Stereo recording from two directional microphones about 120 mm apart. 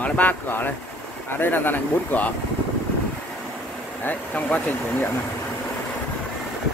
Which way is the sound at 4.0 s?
15° left (ahead or behind).